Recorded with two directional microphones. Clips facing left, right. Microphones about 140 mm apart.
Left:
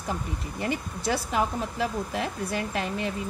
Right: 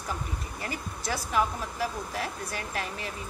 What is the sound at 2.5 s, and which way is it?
Speech, 25° left (ahead or behind).